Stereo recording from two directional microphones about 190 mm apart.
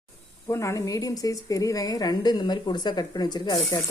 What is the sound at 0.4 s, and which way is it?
A woman's voice, 15° left (ahead or behind).